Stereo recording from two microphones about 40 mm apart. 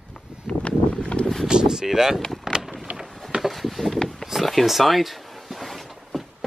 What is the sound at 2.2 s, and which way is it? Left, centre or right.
Vehicle, centre.